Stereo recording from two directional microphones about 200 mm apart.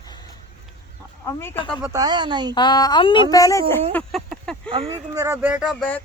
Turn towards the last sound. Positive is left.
turn(degrees=-5)  # may be behind; listen again after turning